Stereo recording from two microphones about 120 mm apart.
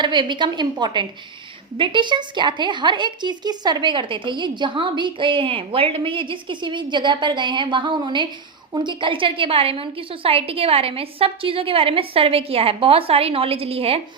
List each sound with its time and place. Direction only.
0.0 s a woman's voice: 40° right (ahead or behind)